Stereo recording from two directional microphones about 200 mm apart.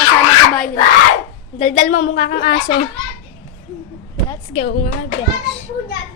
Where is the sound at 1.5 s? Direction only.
35° left (ahead or behind).